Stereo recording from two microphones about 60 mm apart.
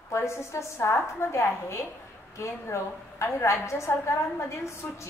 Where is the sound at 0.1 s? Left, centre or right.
Left.